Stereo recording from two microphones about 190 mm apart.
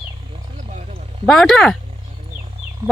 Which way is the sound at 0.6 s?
40° right (ahead or behind).